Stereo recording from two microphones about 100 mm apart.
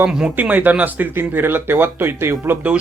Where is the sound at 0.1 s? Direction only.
10° right (ahead or behind).